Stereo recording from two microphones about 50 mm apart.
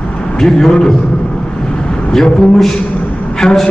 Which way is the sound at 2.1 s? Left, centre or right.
Centre.